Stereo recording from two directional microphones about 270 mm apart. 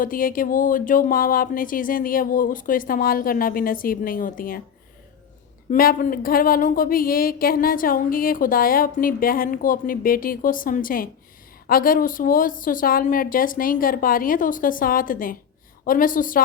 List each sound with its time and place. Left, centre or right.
0.0 s speech: left
5.7 s speech: left